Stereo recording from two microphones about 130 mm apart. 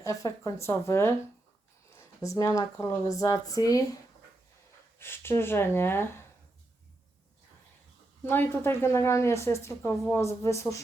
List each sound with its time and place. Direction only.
0.0 s a woman's voice: 25° left (ahead or behind)
4.9 s speech: 20° left (ahead or behind)
8.2 s a woman's voice: 15° left (ahead or behind)